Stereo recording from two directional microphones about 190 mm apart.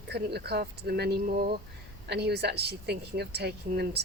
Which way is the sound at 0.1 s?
60° right (ahead or behind).